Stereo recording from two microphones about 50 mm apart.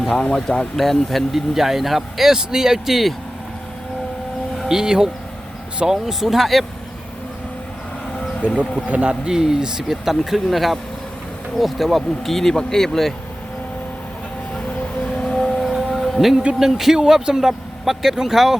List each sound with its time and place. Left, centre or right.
0.2 s speech: centre
4.7 s speech: centre
8.2 s a sound: left
8.9 s speech: right
9.2 s speech: centre
15.2 s vehicle: centre
15.6 s music: centre
16.6 s speech: centre